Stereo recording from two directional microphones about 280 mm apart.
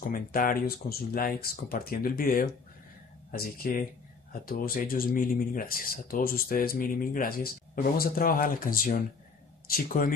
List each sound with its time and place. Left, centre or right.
0.1 s speech: left